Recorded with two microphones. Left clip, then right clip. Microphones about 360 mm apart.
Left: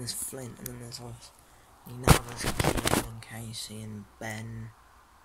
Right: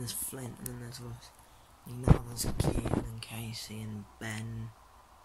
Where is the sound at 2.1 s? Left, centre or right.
Left.